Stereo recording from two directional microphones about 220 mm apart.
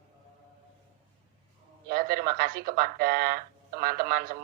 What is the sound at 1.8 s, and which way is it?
Speech, 45° right (ahead or behind).